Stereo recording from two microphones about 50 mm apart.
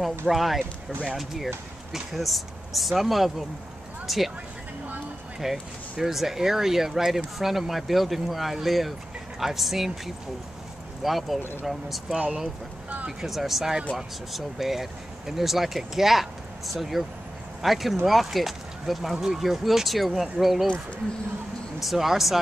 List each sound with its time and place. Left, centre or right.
0.3 s speech: centre
5.4 s speech: centre
12.2 s speech: centre
13.2 s speech: centre
21.8 s speech: centre